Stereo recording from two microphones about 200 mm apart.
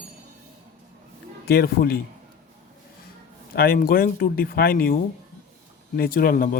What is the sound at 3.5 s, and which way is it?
A man's voice, 50° left (ahead or behind).